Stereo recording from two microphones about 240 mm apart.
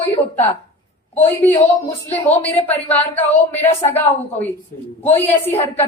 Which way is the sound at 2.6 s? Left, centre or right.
Centre.